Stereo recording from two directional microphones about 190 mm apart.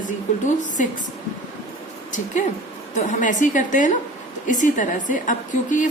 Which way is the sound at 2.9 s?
40° left (ahead or behind).